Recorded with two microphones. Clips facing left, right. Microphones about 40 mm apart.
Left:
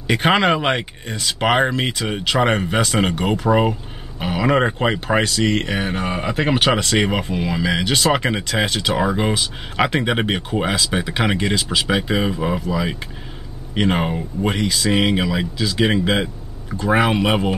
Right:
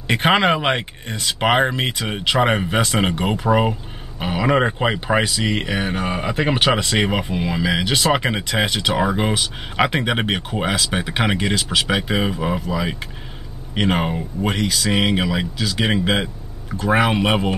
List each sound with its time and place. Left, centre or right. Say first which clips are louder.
0.0 s speech: even; centre